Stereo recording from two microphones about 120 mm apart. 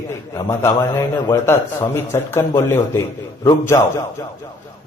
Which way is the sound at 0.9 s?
25° left (ahead or behind).